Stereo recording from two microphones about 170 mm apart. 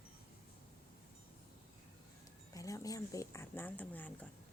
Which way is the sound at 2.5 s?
20° left (ahead or behind).